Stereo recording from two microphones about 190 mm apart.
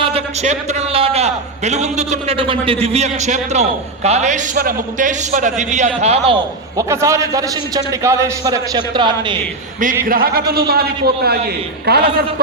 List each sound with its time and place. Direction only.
0.0 s a man's voice: 35° right (ahead or behind)
6.7 s a man's voice: 15° right (ahead or behind)
10.1 s a man's voice: 50° right (ahead or behind)